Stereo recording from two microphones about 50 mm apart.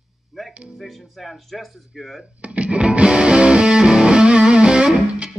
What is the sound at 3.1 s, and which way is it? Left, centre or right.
Music, centre.